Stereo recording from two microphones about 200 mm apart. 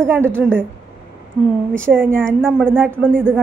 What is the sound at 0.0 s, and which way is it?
Speech, 10° right (ahead or behind).